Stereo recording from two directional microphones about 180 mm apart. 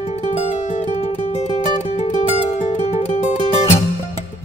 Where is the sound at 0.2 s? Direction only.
35° left (ahead or behind).